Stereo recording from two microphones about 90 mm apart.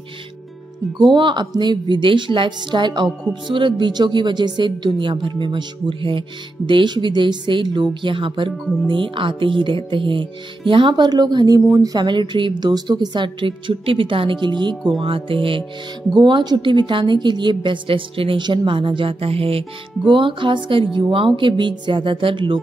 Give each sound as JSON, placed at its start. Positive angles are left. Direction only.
{"t": 0.9, "sound": "a woman's voice", "side_deg": -65}
{"t": 12.1, "sound": "speech", "side_deg": -60}
{"t": 14.9, "sound": "speech", "side_deg": -75}
{"t": 16.1, "sound": "speech", "side_deg": -55}
{"t": 18.4, "sound": "speech", "side_deg": -60}
{"t": 20.1, "sound": "speech", "side_deg": -65}